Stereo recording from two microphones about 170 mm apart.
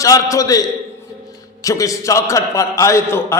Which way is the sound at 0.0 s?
20° left (ahead or behind).